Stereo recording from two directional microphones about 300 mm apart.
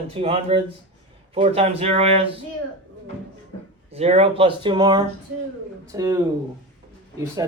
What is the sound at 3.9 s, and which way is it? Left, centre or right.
Speech, right.